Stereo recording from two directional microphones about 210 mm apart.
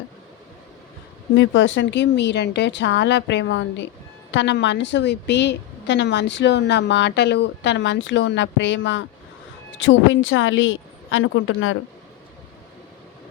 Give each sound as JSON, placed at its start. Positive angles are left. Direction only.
{"t": 1.4, "sound": "a woman's voice", "side_deg": 65}